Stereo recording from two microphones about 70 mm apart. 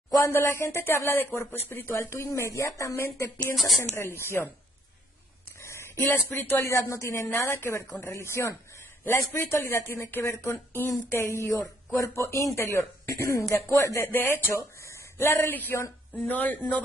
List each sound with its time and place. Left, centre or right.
0.3 s speech: left
2.0 s speech: left
3.5 s speech: centre
3.9 s speech: left
5.6 s speech: left
11.9 s speech: left
14.0 s speech: left
14.5 s speech: left